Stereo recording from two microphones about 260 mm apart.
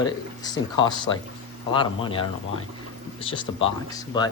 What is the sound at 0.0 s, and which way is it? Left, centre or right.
Speech, centre.